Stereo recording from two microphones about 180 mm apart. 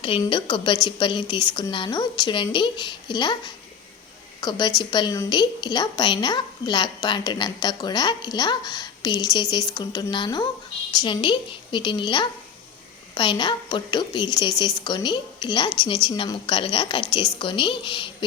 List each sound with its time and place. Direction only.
0.2 s a woman's voice: 25° left (ahead or behind)